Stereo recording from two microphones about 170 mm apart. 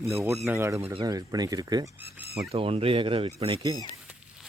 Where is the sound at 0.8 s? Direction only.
30° right (ahead or behind).